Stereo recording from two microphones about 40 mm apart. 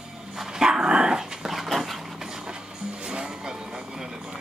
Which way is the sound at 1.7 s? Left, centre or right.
Centre.